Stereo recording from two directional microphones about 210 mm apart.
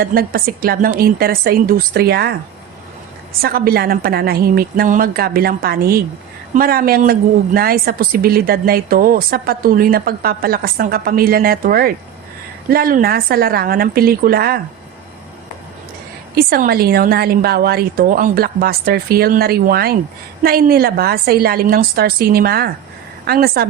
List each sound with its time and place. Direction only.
0.0 s a woman's voice: 45° right (ahead or behind)
3.4 s a woman's voice: 45° right (ahead or behind)
16.3 s a woman's voice: 45° right (ahead or behind)